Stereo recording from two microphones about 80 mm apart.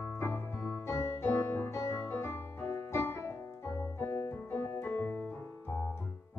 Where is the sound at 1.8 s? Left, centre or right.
Left.